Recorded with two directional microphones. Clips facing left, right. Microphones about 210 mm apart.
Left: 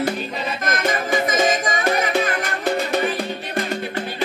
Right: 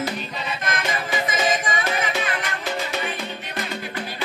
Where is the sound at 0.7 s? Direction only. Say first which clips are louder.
Left 6 dB; 50° left (ahead or behind).